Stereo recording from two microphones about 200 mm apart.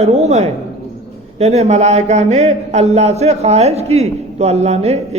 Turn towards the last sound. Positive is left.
turn(degrees=-35)  # may be behind; listen again after turning